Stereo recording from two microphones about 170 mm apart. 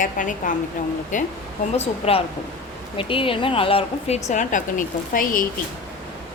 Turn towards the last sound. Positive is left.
turn(degrees=55)  # may be behind; listen again after turning